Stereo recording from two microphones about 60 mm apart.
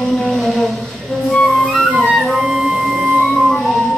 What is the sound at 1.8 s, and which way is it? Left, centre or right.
Music, centre.